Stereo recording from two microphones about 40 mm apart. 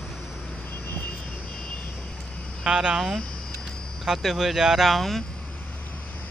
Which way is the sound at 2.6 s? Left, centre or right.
Centre.